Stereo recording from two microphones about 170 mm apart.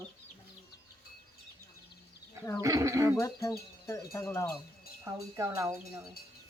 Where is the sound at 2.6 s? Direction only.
20° right (ahead or behind).